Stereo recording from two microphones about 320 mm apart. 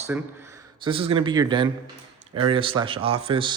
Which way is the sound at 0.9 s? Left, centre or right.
Centre.